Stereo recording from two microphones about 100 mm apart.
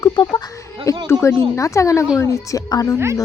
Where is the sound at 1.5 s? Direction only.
30° left (ahead or behind).